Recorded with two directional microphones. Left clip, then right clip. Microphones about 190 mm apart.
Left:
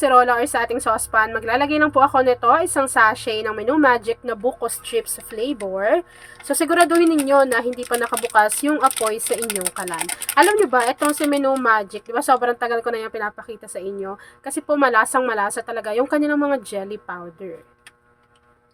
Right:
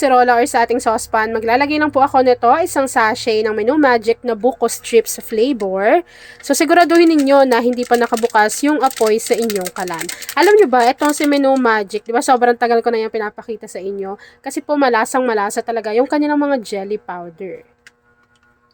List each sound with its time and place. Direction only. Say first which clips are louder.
0.0 s speech: right 3 dB; 30° right (ahead or behind)